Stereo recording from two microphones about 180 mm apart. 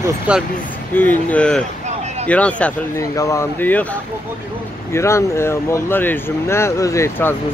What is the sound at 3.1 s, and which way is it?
Speech, 15° left (ahead or behind).